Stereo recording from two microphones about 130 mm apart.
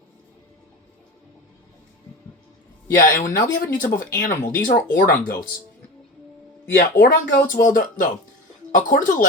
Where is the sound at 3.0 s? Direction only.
90° left.